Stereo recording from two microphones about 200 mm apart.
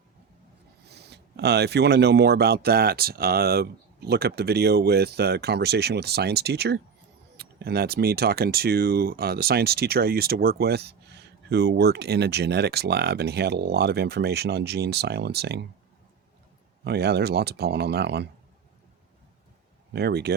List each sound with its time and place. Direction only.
0.9 s speech: 55° right (ahead or behind)
16.8 s speech: 55° right (ahead or behind)
19.9 s speech: 55° right (ahead or behind)